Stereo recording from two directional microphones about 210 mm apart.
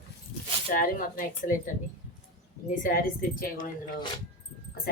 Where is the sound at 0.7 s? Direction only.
40° left (ahead or behind).